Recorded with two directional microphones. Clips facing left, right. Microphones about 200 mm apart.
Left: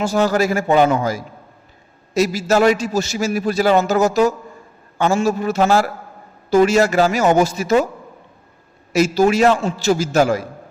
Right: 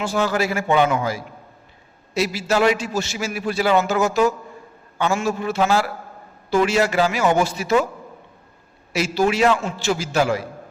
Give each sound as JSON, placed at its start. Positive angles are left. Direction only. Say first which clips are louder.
{"t": 0.0, "sound": "a man's voice", "louder": "left 4 dB", "side_deg": 40}
{"t": 8.9, "sound": "a man's voice", "louder": "left 5 dB", "side_deg": 45}